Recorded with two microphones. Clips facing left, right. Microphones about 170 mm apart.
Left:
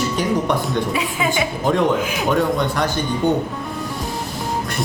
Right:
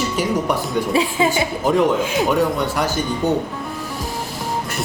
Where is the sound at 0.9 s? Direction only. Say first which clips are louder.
Right 3 dB; 30° right (ahead or behind).